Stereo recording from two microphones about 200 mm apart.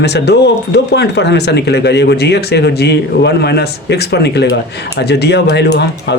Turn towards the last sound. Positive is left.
turn(degrees=60)  # may be behind; listen again after turning